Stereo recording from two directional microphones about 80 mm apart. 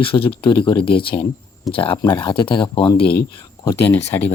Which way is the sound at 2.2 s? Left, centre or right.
Left.